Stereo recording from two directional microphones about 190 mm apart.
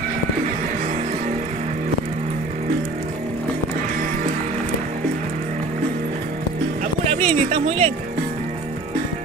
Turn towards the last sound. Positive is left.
turn(degrees=-30)  # may be behind; listen again after turning